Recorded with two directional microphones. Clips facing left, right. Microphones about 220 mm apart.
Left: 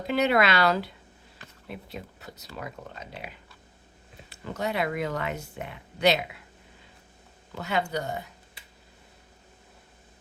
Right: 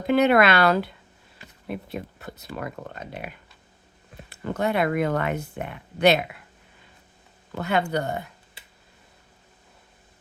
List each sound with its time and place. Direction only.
0.1 s speech: 55° right (ahead or behind)
4.3 s speech: 55° right (ahead or behind)
7.5 s speech: 55° right (ahead or behind)